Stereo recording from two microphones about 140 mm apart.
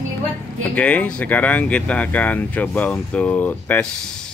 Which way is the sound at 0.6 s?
10° left (ahead or behind).